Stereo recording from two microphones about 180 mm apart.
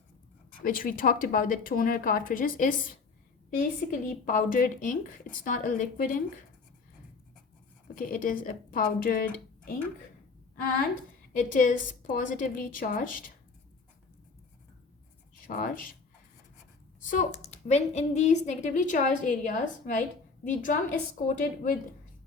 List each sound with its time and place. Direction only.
0.6 s speech: 50° left (ahead or behind)
7.9 s speech: 50° left (ahead or behind)
11.3 s speech: 45° left (ahead or behind)
15.4 s speech: 50° left (ahead or behind)
17.0 s speech: 45° left (ahead or behind)